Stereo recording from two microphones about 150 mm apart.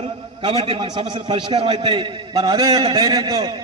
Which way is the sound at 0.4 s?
35° right (ahead or behind).